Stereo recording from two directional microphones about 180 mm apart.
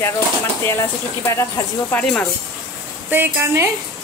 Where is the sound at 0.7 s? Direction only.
15° left (ahead or behind).